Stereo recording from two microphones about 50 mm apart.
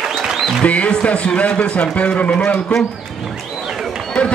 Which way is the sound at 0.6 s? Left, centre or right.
Left.